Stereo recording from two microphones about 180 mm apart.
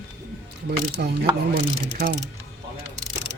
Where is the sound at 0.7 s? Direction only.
65° right (ahead or behind).